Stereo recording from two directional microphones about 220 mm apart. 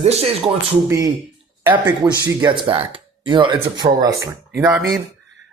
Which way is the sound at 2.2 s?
20° right (ahead or behind).